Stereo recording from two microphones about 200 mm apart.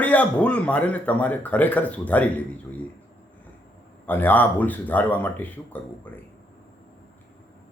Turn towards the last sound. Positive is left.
turn(degrees=10)  # may be behind; listen again after turning